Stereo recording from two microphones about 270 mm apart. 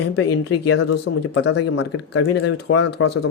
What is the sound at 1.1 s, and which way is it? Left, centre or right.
Speech, left.